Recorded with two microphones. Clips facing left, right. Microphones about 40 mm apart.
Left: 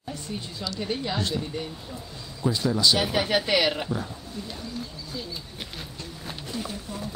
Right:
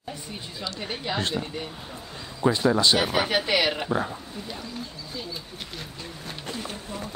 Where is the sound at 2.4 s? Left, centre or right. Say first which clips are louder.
Right 3 dB; right.